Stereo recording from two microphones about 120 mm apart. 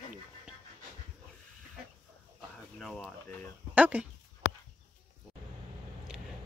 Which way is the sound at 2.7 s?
Centre (ahead or behind).